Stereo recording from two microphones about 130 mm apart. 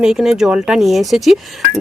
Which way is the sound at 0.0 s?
5° right (ahead or behind).